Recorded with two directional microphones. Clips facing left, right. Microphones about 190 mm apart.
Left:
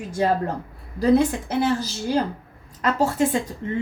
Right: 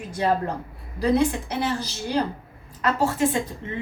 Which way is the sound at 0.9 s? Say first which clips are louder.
Left 3 dB; 45° left (ahead or behind).